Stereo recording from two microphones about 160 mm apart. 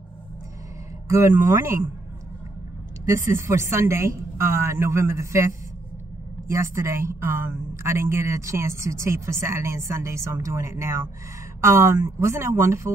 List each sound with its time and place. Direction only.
1.0 s speech: 20° right (ahead or behind)
3.1 s a woman's voice: 20° right (ahead or behind)